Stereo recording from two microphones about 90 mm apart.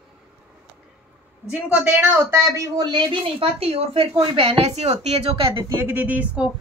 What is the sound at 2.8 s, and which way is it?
Speech, 60° right (ahead or behind).